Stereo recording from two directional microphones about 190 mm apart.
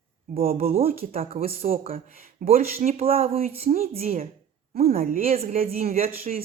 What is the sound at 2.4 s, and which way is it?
Speech, 50° right (ahead or behind).